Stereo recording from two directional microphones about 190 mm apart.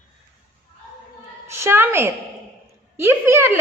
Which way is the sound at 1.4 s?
15° right (ahead or behind).